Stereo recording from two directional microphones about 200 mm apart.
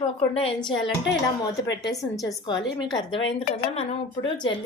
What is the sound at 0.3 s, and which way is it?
A woman's voice, 25° left (ahead or behind).